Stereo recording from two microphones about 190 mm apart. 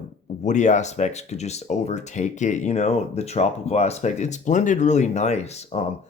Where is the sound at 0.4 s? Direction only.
40° left (ahead or behind).